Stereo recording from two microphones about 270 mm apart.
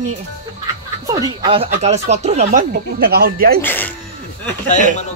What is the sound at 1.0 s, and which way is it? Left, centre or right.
Speech, centre.